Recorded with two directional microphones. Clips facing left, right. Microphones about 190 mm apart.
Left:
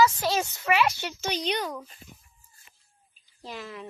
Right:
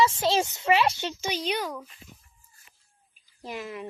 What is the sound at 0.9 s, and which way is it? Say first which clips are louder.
Speech: even; 15° right (ahead or behind).